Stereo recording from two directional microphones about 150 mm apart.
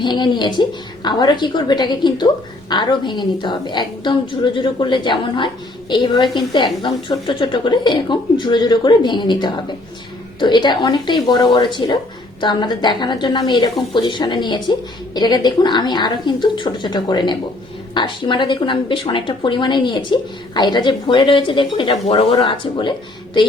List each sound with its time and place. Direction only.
0.0 s a woman's voice: 30° left (ahead or behind)